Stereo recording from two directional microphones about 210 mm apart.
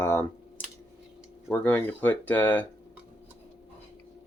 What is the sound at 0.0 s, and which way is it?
Computer keyboard, 10° left (ahead or behind).